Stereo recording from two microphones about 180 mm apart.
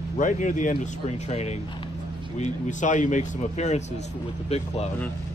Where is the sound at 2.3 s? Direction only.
40° left (ahead or behind).